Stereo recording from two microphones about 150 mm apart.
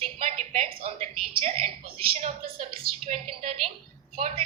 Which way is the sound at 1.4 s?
40° right (ahead or behind).